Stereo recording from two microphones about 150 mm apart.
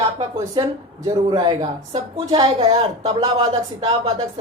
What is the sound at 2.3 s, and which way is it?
Speech, 30° right (ahead or behind).